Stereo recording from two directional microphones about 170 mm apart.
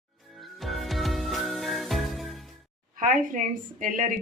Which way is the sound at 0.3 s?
Centre (ahead or behind).